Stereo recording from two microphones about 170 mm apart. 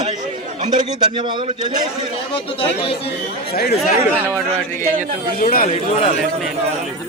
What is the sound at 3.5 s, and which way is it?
Speech, 65° left (ahead or behind).